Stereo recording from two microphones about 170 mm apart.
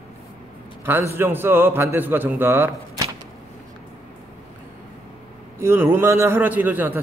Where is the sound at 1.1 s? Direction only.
15° right (ahead or behind).